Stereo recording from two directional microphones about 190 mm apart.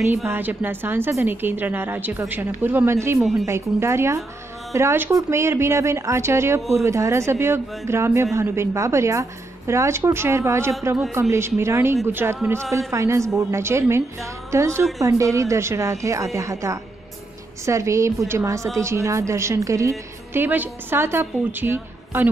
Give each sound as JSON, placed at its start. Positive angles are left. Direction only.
{"t": 0.1, "sound": "speech", "side_deg": -10}
{"t": 3.2, "sound": "a woman's voice", "side_deg": 0}
{"t": 3.4, "sound": "speech", "side_deg": -15}